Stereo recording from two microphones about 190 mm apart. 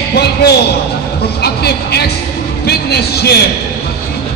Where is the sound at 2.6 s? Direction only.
60° left (ahead or behind).